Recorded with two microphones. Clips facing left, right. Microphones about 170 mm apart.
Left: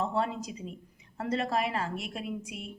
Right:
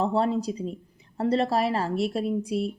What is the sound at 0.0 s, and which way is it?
Speech, 35° right (ahead or behind).